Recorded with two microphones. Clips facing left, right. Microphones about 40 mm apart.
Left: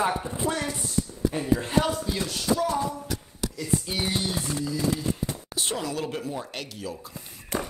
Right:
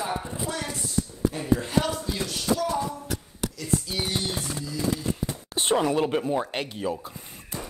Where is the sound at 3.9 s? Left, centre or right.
Left.